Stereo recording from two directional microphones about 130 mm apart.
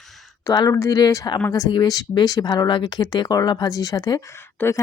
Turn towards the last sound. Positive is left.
turn(degrees=20)  # may be behind; listen again after turning